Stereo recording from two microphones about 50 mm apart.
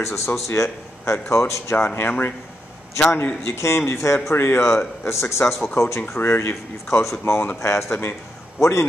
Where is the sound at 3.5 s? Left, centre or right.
Left.